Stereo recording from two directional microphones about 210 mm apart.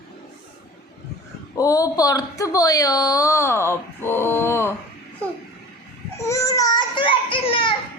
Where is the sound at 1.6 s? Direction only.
15° left (ahead or behind).